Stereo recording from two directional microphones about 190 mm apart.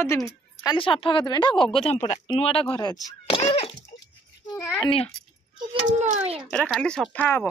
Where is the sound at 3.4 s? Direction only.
30° left (ahead or behind).